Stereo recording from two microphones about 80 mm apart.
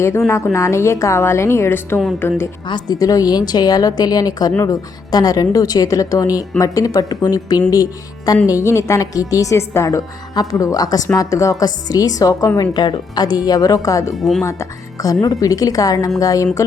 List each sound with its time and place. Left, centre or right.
0.3 s a woman's voice: left
2.6 s a woman's voice: left
8.4 s a woman's voice: left
10.3 s a woman's voice: left
14.2 s speech: centre
14.4 s a woman's voice: left